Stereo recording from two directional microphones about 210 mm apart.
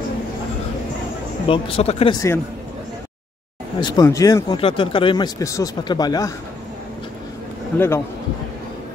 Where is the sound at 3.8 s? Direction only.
15° left (ahead or behind).